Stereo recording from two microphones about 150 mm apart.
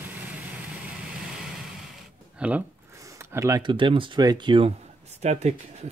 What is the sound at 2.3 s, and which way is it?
Speech, 10° right (ahead or behind).